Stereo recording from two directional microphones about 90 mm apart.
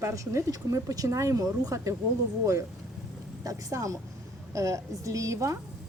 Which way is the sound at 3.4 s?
40° right (ahead or behind).